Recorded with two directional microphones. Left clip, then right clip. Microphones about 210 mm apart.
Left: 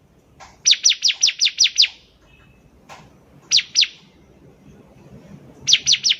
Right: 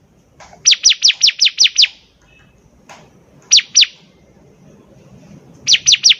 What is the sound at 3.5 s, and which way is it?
Chirp, 25° right (ahead or behind).